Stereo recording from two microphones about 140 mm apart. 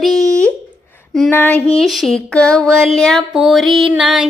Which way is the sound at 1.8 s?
Centre (ahead or behind).